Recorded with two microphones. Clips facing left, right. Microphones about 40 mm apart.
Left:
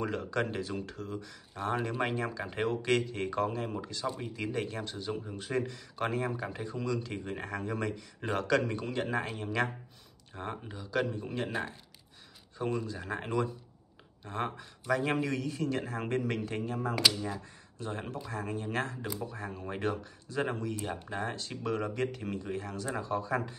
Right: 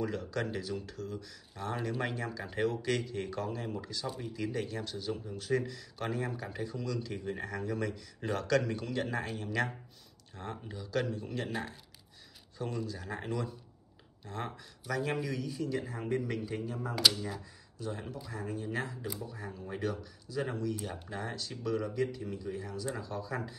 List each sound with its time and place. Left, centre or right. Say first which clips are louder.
0.0 s speech: left 2 dB; left
12.5 s a man's voice: left 4 dB; left
16.9 s speech: right 1 dB; centre
17.7 s a man's voice: left 2 dB; left
22.9 s speech: left 6 dB; left